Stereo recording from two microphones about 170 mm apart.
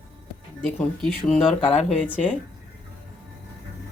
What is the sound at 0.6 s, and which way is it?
Speech, 5° left (ahead or behind).